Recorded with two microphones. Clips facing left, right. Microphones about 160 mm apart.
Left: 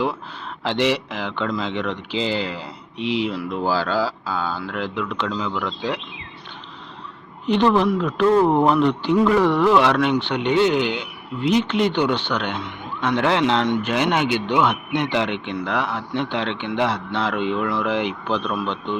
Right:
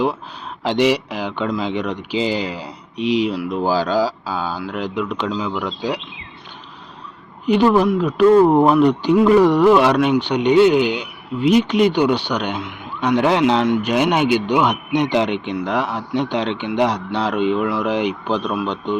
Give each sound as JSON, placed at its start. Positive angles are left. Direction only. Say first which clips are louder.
{"t": 0.6, "sound": "speech", "louder": "right 4 dB", "side_deg": -15}
{"t": 7.4, "sound": "speech", "louder": "right 3 dB", "side_deg": -10}